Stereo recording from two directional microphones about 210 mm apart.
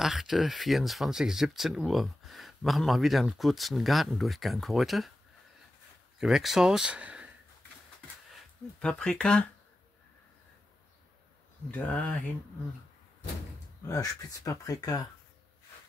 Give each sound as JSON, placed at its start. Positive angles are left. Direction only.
{"t": 0.0, "sound": "speech", "side_deg": 0}
{"t": 6.1, "sound": "speech", "side_deg": 0}
{"t": 8.3, "sound": "speech", "side_deg": 5}
{"t": 11.7, "sound": "speech", "side_deg": 5}
{"t": 13.8, "sound": "speech", "side_deg": 15}